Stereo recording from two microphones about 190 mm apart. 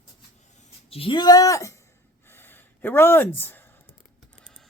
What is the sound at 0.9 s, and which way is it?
Speech, 25° left (ahead or behind).